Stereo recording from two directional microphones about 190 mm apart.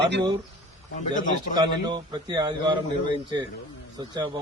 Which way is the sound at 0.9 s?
40° left (ahead or behind).